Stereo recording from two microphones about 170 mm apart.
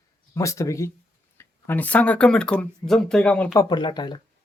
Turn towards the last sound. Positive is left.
turn(degrees=25)  # may be behind; listen again after turning